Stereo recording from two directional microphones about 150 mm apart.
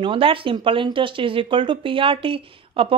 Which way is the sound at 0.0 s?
35° right (ahead or behind).